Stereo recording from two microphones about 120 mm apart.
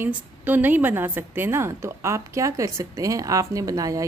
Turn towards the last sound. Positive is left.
turn(degrees=-30)  # may be behind; listen again after turning